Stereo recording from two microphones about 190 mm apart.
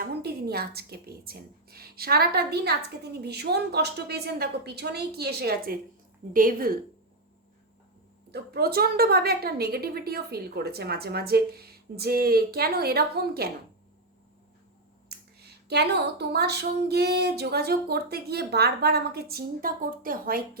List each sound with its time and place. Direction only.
0.0 s a woman's voice: 55° right (ahead or behind)
8.3 s a woman's voice: 55° right (ahead or behind)
15.4 s a woman's voice: 60° right (ahead or behind)